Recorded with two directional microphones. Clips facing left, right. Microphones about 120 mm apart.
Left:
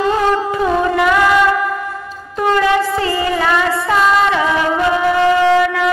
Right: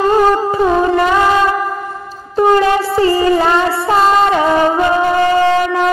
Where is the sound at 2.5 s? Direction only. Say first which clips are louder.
Left 1 dB; 35° right (ahead or behind).